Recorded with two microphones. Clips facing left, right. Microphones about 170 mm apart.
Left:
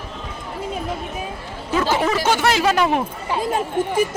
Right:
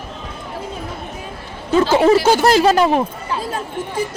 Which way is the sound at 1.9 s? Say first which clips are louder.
Right 8 dB; 35° right (ahead or behind).